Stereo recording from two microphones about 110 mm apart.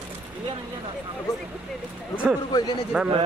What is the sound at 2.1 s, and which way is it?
Speech, 10° right (ahead or behind).